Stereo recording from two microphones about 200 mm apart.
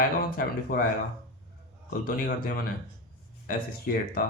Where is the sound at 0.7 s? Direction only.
45° left (ahead or behind).